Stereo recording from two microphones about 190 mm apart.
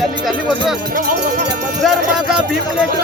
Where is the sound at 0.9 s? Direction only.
45° right (ahead or behind).